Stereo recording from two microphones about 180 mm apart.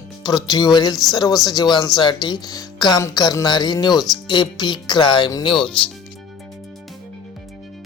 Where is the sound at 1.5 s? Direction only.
20° left (ahead or behind).